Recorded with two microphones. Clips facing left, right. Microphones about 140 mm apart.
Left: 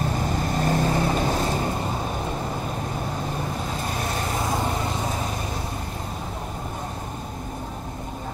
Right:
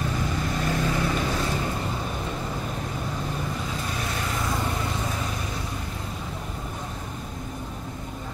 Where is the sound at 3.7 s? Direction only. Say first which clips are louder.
Left 3 dB; 40° left (ahead or behind).